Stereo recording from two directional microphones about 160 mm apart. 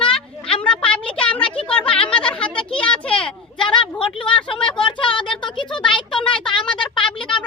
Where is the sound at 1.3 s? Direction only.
35° left (ahead or behind).